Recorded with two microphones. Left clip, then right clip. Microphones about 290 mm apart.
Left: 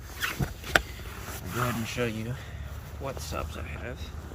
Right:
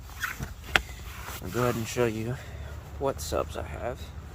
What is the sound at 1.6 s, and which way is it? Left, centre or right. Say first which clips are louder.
Speech: right 4 dB; centre.